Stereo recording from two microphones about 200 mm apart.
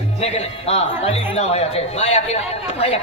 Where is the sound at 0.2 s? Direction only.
30° left (ahead or behind).